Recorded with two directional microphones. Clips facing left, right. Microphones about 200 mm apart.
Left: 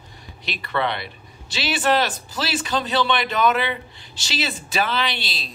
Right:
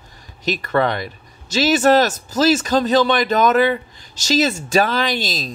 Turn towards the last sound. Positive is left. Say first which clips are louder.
# right 7 dB
turn(degrees=-45)  # may be behind; listen again after turning